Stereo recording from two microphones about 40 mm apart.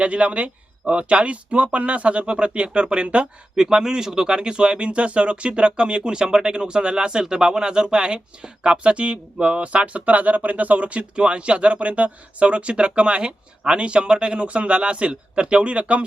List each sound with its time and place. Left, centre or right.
0.0 s speech: right
3.5 s speech: centre